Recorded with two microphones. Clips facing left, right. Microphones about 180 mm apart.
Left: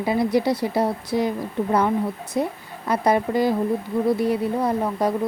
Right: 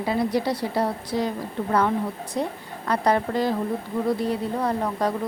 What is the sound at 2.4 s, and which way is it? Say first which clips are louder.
Speech: left 3 dB; 10° left (ahead or behind).